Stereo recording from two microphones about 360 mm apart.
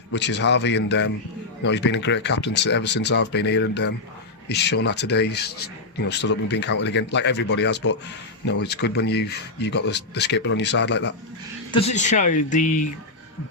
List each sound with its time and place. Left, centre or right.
0.1 s speech: left
11.7 s speech: centre